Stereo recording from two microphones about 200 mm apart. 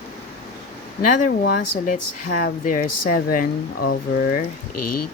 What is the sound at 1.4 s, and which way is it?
Speech, 45° left (ahead or behind).